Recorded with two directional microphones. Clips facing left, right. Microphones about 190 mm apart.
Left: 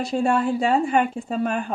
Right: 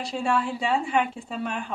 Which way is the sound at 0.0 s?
45° left (ahead or behind).